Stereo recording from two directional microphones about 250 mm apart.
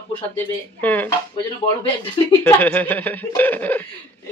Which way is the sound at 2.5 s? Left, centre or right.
Centre.